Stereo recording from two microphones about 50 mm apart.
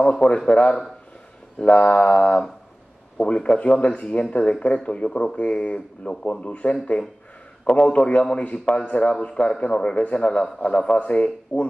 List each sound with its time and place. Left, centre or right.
0.0 s a man's voice: centre
1.6 s speech: left